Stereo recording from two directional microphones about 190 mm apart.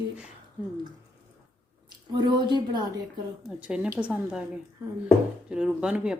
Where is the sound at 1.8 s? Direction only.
25° right (ahead or behind).